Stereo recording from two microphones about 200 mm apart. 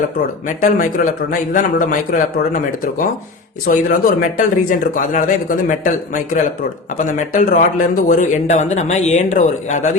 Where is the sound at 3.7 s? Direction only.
45° left (ahead or behind).